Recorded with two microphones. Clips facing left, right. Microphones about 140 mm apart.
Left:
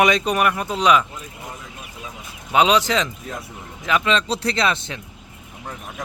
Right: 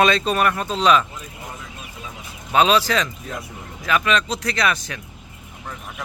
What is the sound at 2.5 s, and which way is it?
Speech, 20° left (ahead or behind).